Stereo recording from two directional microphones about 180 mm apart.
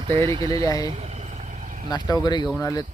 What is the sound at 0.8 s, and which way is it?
Vehicle, 40° right (ahead or behind).